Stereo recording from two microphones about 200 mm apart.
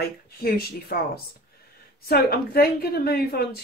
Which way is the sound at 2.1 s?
50° left (ahead or behind).